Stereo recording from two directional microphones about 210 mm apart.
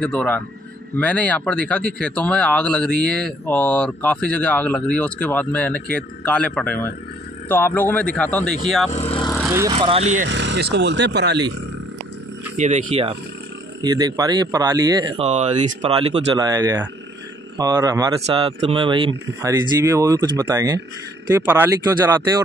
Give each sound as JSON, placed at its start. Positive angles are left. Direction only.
{"t": 0.0, "sound": "speech", "side_deg": 5}
{"t": 8.9, "sound": "speech", "side_deg": 30}
{"t": 9.5, "sound": "speech", "side_deg": -15}
{"t": 9.8, "sound": "speech", "side_deg": -25}
{"t": 10.2, "sound": "speech", "side_deg": -60}
{"t": 12.5, "sound": "speech", "side_deg": -35}
{"t": 13.8, "sound": "speech", "side_deg": -20}
{"t": 18.2, "sound": "speech", "side_deg": -25}